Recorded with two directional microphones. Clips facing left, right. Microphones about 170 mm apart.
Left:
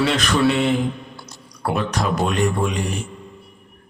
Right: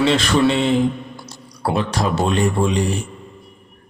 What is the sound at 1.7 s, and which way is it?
A man's voice, 30° right (ahead or behind).